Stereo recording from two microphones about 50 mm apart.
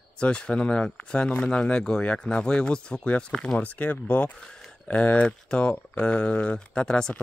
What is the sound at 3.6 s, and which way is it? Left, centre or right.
Speech, left.